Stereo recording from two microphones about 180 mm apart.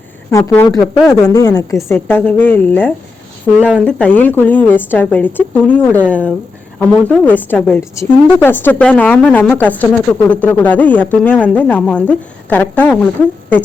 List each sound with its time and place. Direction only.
0.3 s a woman's voice: 15° left (ahead or behind)